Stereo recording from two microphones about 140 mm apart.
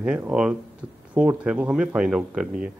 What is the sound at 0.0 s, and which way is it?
Speech, 5° right (ahead or behind).